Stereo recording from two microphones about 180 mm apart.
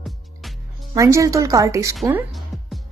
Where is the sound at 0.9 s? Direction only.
15° right (ahead or behind).